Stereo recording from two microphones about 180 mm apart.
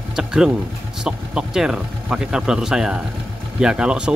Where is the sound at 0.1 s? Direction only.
5° right (ahead or behind).